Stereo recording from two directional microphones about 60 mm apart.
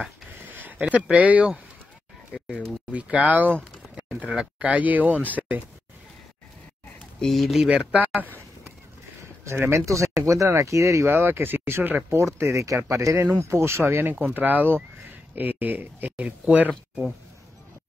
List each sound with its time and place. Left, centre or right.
0.3 s a sound: right
1.1 s speech: right
2.9 s speech: right
4.3 s speech: centre
4.6 s speech: right
7.2 s speech: centre
7.7 s speech: right
9.4 s speech: right
12.1 s speech: right
12.6 s speech: right